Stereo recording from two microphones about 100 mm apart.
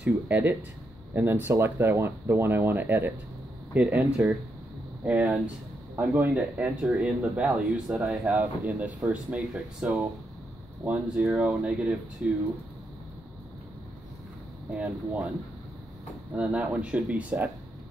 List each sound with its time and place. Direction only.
0.0 s speech: 15° right (ahead or behind)
14.7 s speech: 10° right (ahead or behind)
16.3 s speech: 10° right (ahead or behind)